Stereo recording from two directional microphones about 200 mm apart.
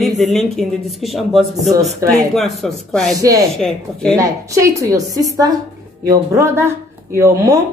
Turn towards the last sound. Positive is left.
turn(degrees=-15)  # may be behind; listen again after turning